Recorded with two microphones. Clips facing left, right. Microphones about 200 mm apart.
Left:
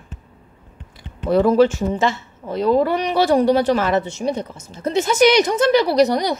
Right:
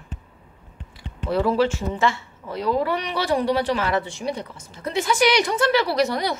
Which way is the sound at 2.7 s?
45° left (ahead or behind).